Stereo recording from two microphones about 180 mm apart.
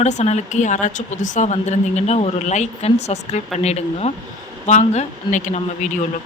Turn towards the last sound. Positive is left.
turn(degrees=40)  # may be behind; listen again after turning